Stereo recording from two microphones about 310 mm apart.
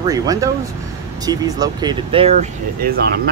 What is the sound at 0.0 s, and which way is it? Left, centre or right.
Speech, centre.